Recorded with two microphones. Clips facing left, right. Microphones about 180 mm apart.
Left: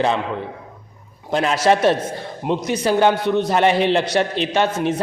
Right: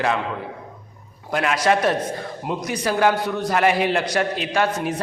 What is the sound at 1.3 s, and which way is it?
A man's voice, 30° left (ahead or behind).